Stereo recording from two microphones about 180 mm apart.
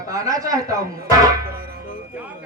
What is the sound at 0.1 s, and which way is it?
Speech, 20° right (ahead or behind).